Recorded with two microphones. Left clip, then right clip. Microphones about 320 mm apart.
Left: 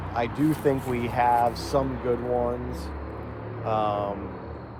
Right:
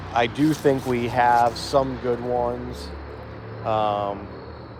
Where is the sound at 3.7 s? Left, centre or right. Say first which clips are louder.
Right 3 dB; right.